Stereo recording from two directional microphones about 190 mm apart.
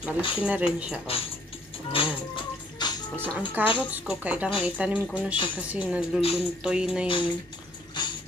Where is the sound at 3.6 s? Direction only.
10° right (ahead or behind).